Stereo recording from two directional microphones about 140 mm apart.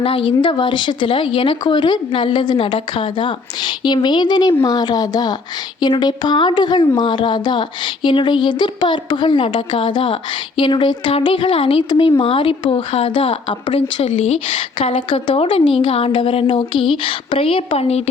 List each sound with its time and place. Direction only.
0.0 s speech: 40° left (ahead or behind)